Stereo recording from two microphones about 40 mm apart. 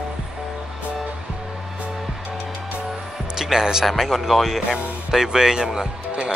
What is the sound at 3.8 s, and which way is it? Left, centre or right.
Speech, centre.